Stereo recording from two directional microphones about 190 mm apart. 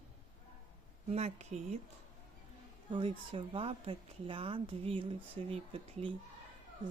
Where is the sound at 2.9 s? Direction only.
25° right (ahead or behind).